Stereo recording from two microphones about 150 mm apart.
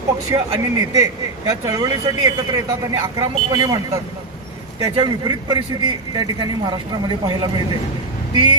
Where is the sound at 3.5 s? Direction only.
25° right (ahead or behind).